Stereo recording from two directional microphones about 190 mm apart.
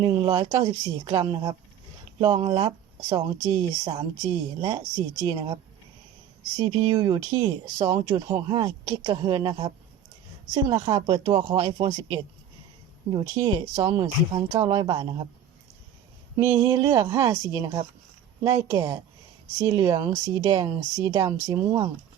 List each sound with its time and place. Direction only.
0.0 s speech: 20° right (ahead or behind)
6.6 s speech: 20° right (ahead or behind)
16.6 s a woman's voice: 15° right (ahead or behind)